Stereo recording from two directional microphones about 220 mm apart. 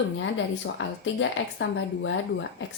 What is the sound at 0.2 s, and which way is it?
Speech, 60° left (ahead or behind).